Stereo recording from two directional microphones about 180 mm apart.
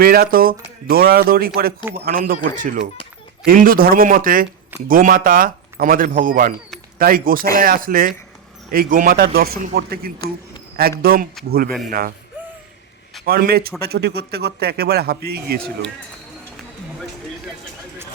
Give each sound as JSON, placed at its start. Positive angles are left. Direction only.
{"t": 0.0, "sound": "speech", "side_deg": -55}
{"t": 13.2, "sound": "speech", "side_deg": -55}